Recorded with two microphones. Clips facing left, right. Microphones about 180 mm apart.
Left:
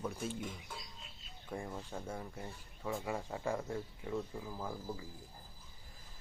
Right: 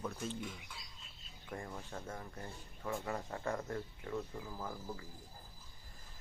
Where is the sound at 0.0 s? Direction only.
10° left (ahead or behind).